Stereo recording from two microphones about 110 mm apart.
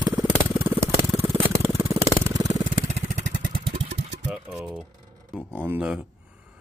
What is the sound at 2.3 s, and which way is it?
Vehicle, 35° right (ahead or behind).